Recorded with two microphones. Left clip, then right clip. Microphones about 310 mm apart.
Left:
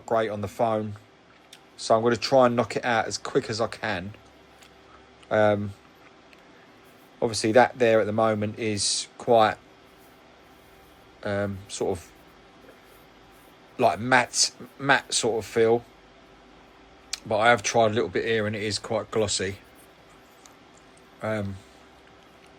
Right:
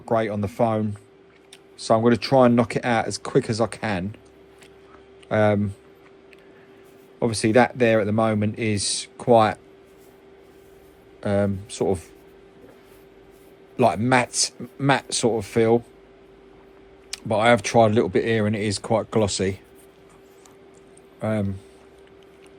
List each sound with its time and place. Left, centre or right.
0.0 s speech: right
2.0 s speech: right
5.3 s speech: right
7.2 s speech: right
11.2 s speech: right
13.7 s speech: right
17.1 s speech: right
21.2 s speech: centre